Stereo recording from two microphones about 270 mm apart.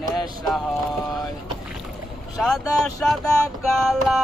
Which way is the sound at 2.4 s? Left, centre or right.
Centre.